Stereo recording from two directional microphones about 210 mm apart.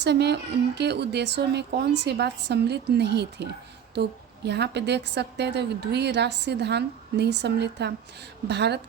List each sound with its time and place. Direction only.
0.0 s a woman's voice: 55° right (ahead or behind)